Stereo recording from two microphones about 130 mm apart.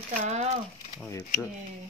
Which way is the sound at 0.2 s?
60° right (ahead or behind).